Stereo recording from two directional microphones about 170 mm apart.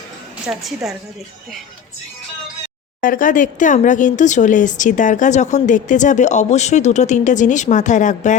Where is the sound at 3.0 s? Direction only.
55° left (ahead or behind).